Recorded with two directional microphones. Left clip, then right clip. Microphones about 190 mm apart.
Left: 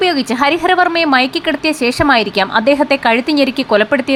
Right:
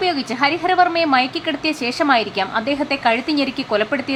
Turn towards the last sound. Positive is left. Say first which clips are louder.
# left 7 dB
turn(degrees=25)  # may be behind; listen again after turning